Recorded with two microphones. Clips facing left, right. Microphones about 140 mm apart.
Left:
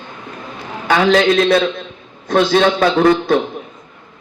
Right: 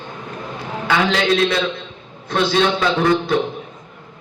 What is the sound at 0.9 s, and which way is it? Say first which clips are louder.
A man's voice: left 5 dB; 40° left (ahead or behind).